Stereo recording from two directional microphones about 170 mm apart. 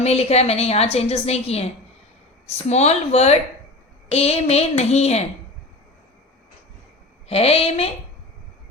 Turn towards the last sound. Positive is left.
turn(degrees=35)  # may be behind; listen again after turning